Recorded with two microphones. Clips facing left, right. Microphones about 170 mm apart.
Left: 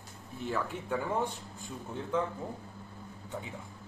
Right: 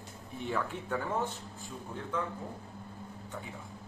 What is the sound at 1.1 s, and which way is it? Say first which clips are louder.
Speech: left 1 dB; 15° left (ahead or behind).